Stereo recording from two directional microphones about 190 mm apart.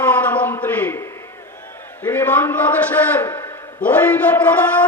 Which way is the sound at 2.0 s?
10° left (ahead or behind).